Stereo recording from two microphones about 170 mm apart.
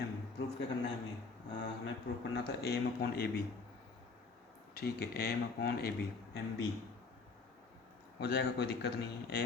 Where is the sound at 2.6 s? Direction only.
65° left (ahead or behind).